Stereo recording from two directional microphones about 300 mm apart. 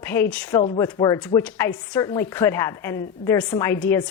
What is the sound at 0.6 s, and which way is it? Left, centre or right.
A woman's voice, centre.